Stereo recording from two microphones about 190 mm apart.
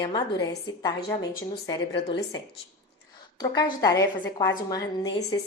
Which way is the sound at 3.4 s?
20° left (ahead or behind).